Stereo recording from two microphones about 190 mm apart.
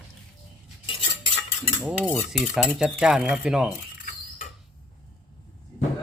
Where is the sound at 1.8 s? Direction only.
5° right (ahead or behind).